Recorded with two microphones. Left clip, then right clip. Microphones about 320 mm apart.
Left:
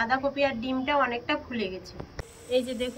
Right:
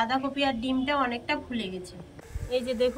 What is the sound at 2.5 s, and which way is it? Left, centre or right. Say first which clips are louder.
Speech: right 1 dB; centre.